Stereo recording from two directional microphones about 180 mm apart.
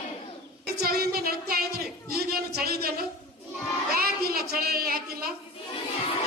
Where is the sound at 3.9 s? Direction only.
55° right (ahead or behind).